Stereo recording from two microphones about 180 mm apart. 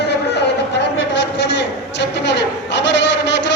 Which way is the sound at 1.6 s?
75° left (ahead or behind).